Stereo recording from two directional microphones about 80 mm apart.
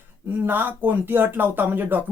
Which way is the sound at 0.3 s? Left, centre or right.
Right.